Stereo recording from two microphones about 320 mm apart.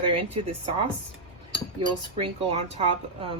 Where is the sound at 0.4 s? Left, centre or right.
Centre.